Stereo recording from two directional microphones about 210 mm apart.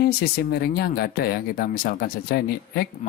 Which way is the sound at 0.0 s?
50° left (ahead or behind).